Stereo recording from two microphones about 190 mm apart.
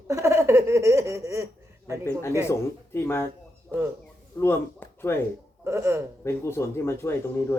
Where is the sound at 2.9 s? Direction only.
10° left (ahead or behind).